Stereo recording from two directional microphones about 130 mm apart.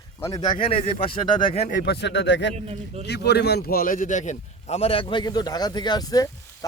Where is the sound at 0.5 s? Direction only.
45° left (ahead or behind).